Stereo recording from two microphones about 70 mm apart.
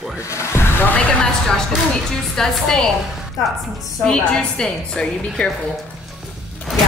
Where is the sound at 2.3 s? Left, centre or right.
Centre.